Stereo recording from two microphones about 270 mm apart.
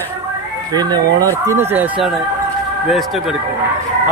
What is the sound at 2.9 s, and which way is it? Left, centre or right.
Speech, centre.